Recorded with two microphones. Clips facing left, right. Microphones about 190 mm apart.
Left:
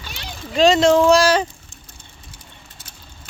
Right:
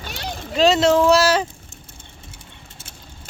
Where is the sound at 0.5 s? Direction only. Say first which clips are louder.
Left 2 dB; 5° right (ahead or behind).